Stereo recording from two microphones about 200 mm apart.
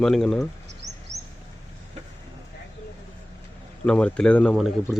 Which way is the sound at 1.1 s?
15° right (ahead or behind).